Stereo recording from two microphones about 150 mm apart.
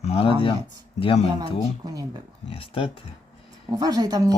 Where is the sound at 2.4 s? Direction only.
35° left (ahead or behind).